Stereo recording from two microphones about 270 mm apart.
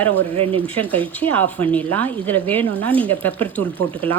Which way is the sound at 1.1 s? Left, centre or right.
Centre.